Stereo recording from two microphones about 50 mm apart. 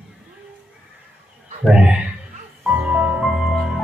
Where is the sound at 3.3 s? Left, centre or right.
Centre.